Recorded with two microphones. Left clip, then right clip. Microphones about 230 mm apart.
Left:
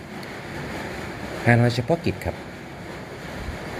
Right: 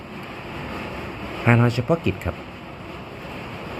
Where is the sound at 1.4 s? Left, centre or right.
Centre.